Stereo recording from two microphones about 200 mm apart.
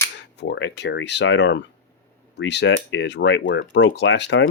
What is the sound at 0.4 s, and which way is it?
Speech, 60° left (ahead or behind).